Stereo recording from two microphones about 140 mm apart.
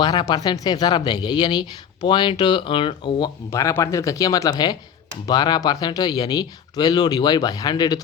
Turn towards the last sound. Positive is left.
turn(degrees=30)  # may be behind; listen again after turning